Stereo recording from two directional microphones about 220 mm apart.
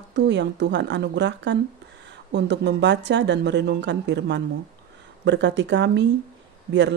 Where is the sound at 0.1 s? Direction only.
50° right (ahead or behind).